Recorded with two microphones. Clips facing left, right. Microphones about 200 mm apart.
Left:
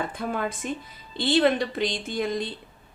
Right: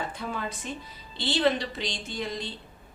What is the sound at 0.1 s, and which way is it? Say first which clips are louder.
A woman's voice: left 5 dB; 50° left (ahead or behind).